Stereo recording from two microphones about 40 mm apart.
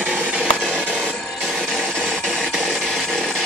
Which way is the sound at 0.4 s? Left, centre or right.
Right.